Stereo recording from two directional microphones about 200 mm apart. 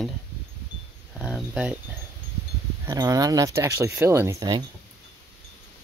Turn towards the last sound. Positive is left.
turn(degrees=-20)  # may be behind; listen again after turning